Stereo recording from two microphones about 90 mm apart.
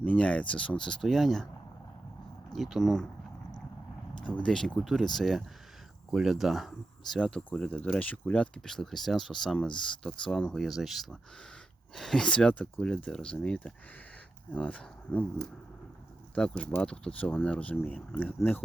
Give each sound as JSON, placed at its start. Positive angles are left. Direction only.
{"t": 0.0, "sound": "speech", "side_deg": 15}
{"t": 2.6, "sound": "speech", "side_deg": 0}
{"t": 4.3, "sound": "speech", "side_deg": 15}
{"t": 16.3, "sound": "speech", "side_deg": 10}